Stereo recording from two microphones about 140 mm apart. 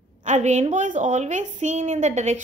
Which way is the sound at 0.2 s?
55° right (ahead or behind).